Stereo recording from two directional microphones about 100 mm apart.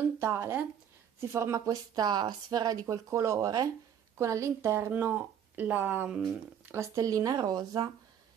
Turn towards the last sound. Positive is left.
turn(degrees=-40)  # may be behind; listen again after turning